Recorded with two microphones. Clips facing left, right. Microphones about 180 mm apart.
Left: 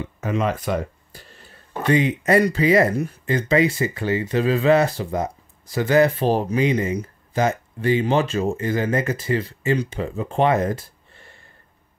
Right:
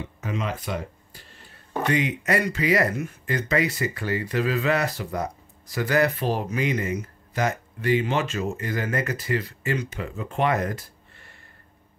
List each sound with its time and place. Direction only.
0.2 s speech: 50° left (ahead or behind)
1.9 s speech: 30° left (ahead or behind)